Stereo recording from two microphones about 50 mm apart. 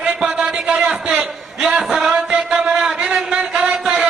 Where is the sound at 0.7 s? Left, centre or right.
Centre.